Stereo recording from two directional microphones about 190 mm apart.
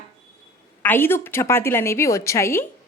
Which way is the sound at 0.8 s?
10° left (ahead or behind).